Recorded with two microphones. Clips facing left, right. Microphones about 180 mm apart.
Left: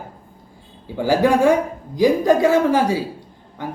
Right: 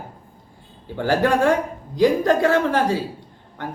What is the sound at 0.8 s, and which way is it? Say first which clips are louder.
A man's voice: left 3 dB; 10° left (ahead or behind).